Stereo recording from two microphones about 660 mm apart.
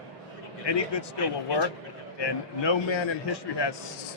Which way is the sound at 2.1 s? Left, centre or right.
Left.